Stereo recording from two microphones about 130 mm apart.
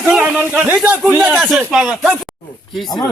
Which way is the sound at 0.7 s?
10° right (ahead or behind).